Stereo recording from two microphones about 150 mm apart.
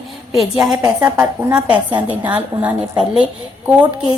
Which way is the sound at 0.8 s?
20° right (ahead or behind).